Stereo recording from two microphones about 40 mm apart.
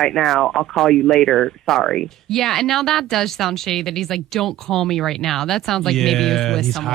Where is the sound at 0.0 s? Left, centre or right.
Centre.